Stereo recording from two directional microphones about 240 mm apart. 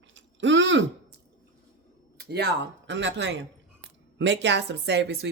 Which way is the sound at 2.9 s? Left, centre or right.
Right.